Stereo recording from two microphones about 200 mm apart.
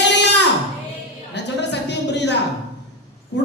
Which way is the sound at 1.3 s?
60° left (ahead or behind).